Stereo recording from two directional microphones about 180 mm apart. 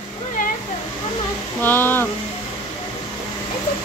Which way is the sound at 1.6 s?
10° left (ahead or behind).